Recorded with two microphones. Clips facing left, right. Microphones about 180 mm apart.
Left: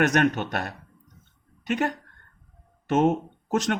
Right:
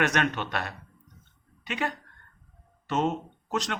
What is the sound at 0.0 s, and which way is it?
Speech, 45° left (ahead or behind).